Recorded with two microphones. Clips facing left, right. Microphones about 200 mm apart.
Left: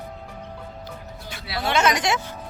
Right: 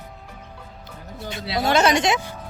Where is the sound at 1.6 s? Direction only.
40° right (ahead or behind); by 2.4 s 15° right (ahead or behind).